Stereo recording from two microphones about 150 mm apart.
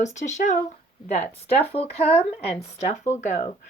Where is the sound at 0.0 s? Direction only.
50° left (ahead or behind).